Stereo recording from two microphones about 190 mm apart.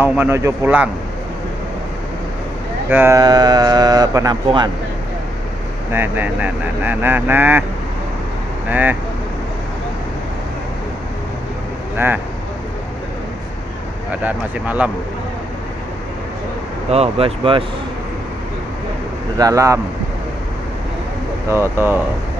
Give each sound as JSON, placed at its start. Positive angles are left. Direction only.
{"t": 0.0, "sound": "speech", "side_deg": -10}
{"t": 2.9, "sound": "speech", "side_deg": -15}
{"t": 5.9, "sound": "speech", "side_deg": -10}
{"t": 8.6, "sound": "speech", "side_deg": -10}
{"t": 14.2, "sound": "speech", "side_deg": -10}
{"t": 16.9, "sound": "speech", "side_deg": -30}
{"t": 19.3, "sound": "speech", "side_deg": -20}
{"t": 21.5, "sound": "speech", "side_deg": -15}